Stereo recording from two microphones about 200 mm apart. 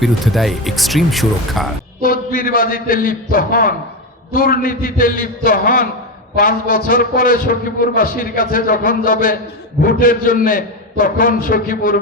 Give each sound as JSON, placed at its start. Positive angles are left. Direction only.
{"t": 0.0, "sound": "speech", "side_deg": 0}
{"t": 2.0, "sound": "a man's voice", "side_deg": 45}